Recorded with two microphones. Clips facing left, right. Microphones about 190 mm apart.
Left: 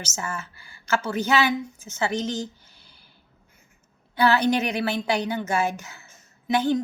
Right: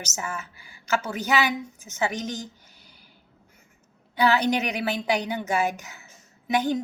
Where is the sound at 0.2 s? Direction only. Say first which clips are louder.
Left 1 dB; 15° right (ahead or behind).